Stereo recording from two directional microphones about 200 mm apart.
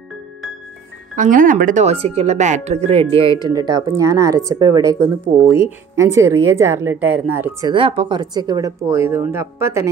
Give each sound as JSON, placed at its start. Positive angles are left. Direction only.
{"t": 1.1, "sound": "speech", "side_deg": -40}
{"t": 7.7, "sound": "speech", "side_deg": -25}